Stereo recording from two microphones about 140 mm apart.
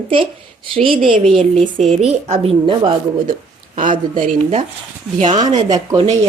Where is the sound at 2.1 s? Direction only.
45° right (ahead or behind).